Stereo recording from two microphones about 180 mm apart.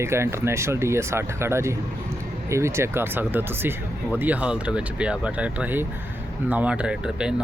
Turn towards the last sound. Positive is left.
turn(degrees=-5)  # may be behind; listen again after turning